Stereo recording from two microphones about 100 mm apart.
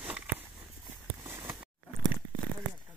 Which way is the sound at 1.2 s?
25° right (ahead or behind).